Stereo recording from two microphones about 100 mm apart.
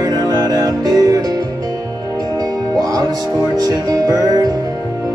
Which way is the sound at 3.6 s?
40° right (ahead or behind).